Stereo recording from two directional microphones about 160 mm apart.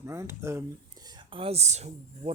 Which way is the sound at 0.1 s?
15° right (ahead or behind).